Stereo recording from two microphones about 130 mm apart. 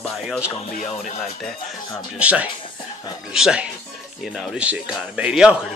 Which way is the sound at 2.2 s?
10° right (ahead or behind).